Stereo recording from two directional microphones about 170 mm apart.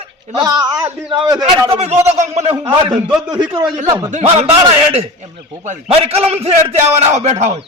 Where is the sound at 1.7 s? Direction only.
40° right (ahead or behind).